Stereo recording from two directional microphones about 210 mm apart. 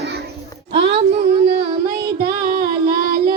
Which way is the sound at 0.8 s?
55° right (ahead or behind).